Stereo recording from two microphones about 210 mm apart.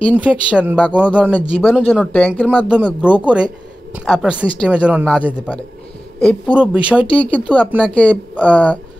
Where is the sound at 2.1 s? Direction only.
5° left (ahead or behind).